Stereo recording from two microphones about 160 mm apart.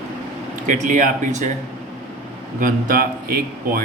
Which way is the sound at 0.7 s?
55° right (ahead or behind).